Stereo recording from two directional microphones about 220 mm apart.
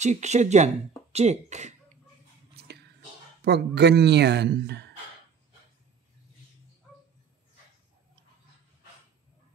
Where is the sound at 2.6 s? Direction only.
45° right (ahead or behind).